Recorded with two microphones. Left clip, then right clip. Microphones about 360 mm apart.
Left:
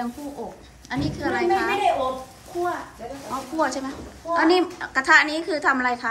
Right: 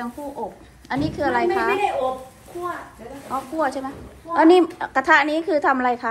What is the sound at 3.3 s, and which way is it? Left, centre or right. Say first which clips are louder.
A woman's voice: right 2 dB; centre.